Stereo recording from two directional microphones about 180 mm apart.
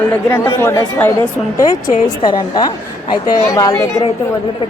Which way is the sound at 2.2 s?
25° left (ahead or behind).